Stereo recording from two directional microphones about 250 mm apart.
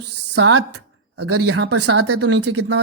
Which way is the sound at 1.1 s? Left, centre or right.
Right.